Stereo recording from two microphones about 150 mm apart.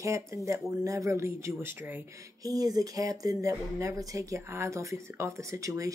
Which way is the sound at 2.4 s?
25° right (ahead or behind).